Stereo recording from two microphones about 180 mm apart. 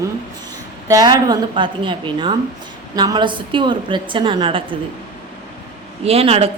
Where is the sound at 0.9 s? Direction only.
20° right (ahead or behind).